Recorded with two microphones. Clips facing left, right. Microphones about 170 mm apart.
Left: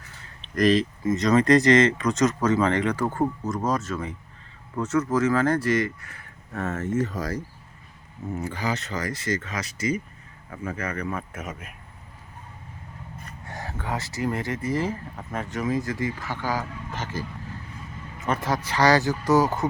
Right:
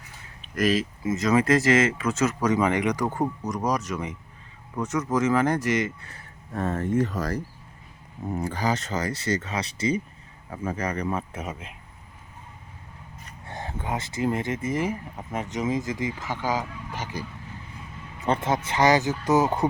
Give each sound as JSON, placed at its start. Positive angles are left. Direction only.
{"t": 0.2, "sound": "speech", "side_deg": -5}
{"t": 6.1, "sound": "a sound", "side_deg": -30}
{"t": 8.4, "sound": "speech", "side_deg": -45}
{"t": 11.0, "sound": "speech", "side_deg": -25}
{"t": 13.5, "sound": "speech", "side_deg": -25}
{"t": 18.2, "sound": "speech", "side_deg": -30}